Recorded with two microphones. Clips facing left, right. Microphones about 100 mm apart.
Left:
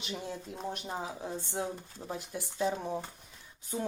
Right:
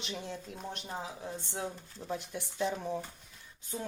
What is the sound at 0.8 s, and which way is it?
Speech, 25° left (ahead or behind).